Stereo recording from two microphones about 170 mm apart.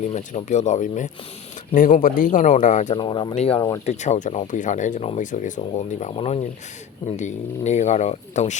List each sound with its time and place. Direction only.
0.1 s speech: 45° left (ahead or behind)
3.0 s speech: 25° left (ahead or behind)
3.3 s speech: 35° left (ahead or behind)